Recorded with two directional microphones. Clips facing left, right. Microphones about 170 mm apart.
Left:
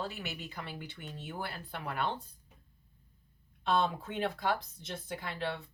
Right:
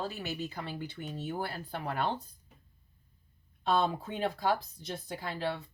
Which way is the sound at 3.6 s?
35° right (ahead or behind).